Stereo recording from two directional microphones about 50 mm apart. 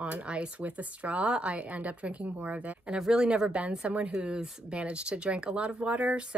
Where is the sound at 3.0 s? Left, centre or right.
Centre.